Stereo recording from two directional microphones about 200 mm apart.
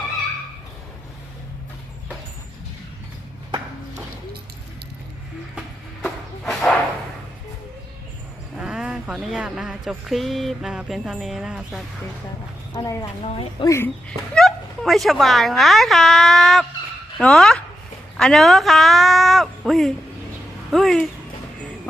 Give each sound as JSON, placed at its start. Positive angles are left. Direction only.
{"t": 5.5, "sound": "music", "side_deg": 0}
{"t": 8.5, "sound": "speech", "side_deg": -5}
{"t": 12.7, "sound": "a woman's voice", "side_deg": 15}
{"t": 13.2, "sound": "a woman's voice", "side_deg": 30}
{"t": 13.7, "sound": "speech", "side_deg": 10}